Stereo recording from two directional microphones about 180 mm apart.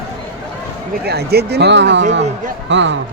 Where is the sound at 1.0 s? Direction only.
65° right (ahead or behind); by 3.0 s 90° right.